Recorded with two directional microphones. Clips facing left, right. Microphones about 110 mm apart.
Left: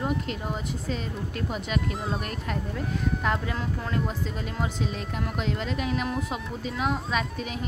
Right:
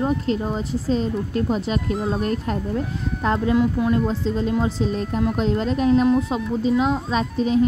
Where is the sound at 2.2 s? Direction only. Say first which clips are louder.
Right 9 dB; 30° right (ahead or behind).